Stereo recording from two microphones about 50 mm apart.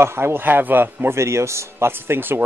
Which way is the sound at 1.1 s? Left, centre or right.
Right.